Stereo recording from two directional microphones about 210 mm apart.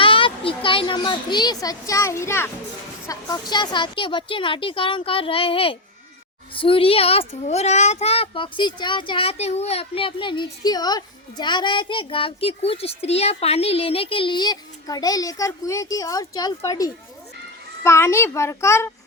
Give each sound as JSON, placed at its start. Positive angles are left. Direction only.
{"t": 0.0, "sound": "a child's voice", "side_deg": 25}